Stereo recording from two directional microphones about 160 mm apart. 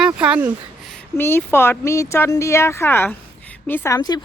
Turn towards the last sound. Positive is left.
turn(degrees=25)  # may be behind; listen again after turning